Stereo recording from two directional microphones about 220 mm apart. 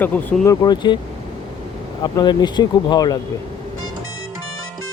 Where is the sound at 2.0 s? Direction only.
20° left (ahead or behind).